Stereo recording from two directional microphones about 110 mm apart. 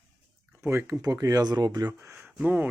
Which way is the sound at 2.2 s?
15° right (ahead or behind).